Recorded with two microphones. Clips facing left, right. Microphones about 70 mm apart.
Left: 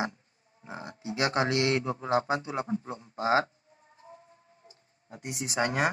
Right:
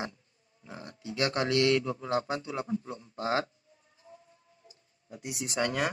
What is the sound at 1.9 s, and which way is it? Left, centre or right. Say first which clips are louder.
Speech: left 3 dB; left.